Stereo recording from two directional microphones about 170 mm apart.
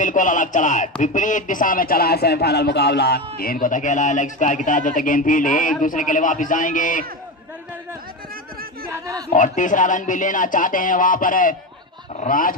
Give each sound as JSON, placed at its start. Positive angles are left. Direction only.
{"t": 0.0, "sound": "speech", "side_deg": 50}
{"t": 9.3, "sound": "speech", "side_deg": 50}